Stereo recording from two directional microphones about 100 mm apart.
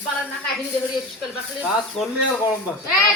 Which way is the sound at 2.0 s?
5° left (ahead or behind).